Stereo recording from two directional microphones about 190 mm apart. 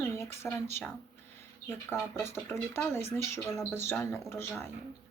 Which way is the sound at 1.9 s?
15° left (ahead or behind).